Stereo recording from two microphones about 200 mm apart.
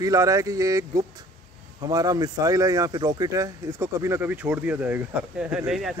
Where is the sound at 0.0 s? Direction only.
15° right (ahead or behind).